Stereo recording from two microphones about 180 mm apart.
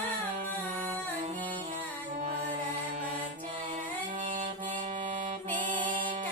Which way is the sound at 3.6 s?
30° right (ahead or behind).